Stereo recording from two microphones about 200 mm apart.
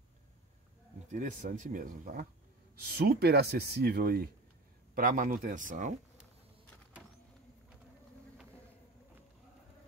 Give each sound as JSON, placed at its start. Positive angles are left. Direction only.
{"t": 1.1, "sound": "speech", "side_deg": -40}